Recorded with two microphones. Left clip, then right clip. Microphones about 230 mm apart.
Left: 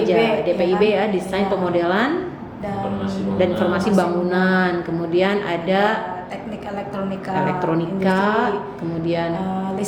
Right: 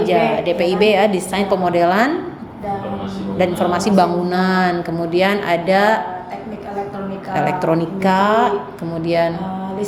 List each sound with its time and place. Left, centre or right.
0.1 s a woman's voice: right
3.7 s a woman's voice: right
7.3 s a woman's voice: right